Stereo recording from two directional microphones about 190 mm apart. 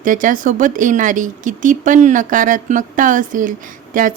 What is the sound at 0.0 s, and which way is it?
Speech, 45° right (ahead or behind).